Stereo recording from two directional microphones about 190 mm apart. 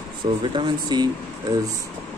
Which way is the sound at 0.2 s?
25° right (ahead or behind).